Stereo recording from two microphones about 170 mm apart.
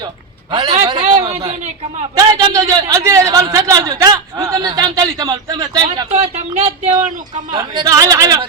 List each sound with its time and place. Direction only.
0.5 s a man's voice: 25° right (ahead or behind)
1.0 s a man's voice: 40° right (ahead or behind)
2.1 s a man's voice: 20° right (ahead or behind); by 6.9 s 40° right (ahead or behind)
7.5 s a man's voice: 25° right (ahead or behind)